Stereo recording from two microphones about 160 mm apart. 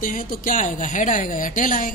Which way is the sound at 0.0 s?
55° left (ahead or behind).